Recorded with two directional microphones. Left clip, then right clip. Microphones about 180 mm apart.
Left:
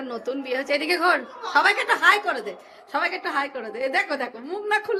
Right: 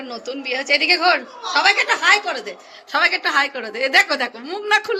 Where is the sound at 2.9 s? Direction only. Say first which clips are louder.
Right 8 dB; centre (ahead or behind).